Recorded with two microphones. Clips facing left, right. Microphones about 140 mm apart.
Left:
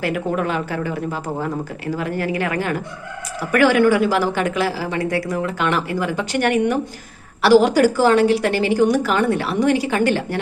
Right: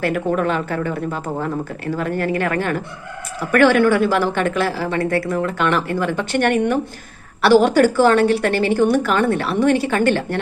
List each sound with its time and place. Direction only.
0.0 s a woman's voice: 10° left (ahead or behind)
2.1 s speech: 55° right (ahead or behind)
2.4 s a woman's voice: 15° left (ahead or behind)